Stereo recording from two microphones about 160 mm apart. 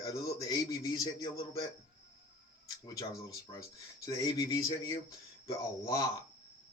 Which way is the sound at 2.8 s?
20° left (ahead or behind).